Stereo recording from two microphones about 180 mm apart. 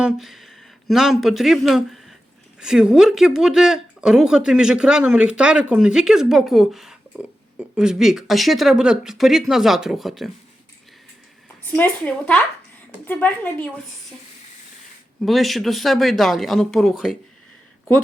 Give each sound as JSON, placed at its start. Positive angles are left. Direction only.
{"t": 0.0, "sound": "speech", "side_deg": 0}
{"t": 11.6, "sound": "speech", "side_deg": 10}
{"t": 15.2, "sound": "speech", "side_deg": 0}